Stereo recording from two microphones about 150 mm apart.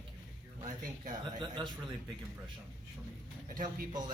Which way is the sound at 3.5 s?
60° right (ahead or behind).